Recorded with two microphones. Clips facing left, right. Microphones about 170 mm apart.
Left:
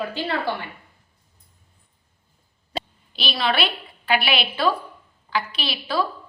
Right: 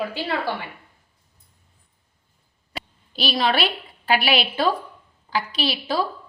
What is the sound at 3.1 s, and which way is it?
A woman's voice, 40° right (ahead or behind).